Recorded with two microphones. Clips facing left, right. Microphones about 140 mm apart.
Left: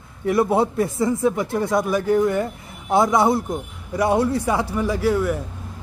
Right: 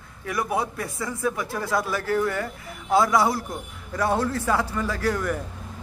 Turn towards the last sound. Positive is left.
turn(degrees=10)  # may be behind; listen again after turning